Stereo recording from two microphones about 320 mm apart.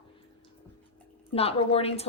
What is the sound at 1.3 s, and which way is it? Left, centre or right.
Speech, centre.